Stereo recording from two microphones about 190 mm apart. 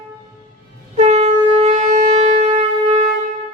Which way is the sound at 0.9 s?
35° right (ahead or behind).